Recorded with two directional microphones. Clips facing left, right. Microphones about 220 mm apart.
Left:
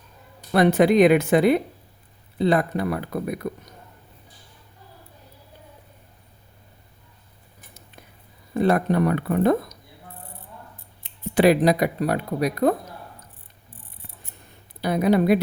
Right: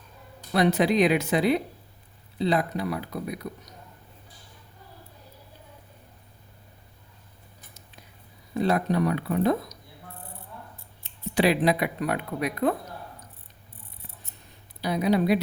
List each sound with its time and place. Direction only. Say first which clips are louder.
0.5 s speech: left 5 dB; 55° left (ahead or behind)
8.5 s speech: left 4 dB; 55° left (ahead or behind)
11.3 s speech: left 5 dB; 45° left (ahead or behind)
14.8 s speech: left 4 dB; 55° left (ahead or behind)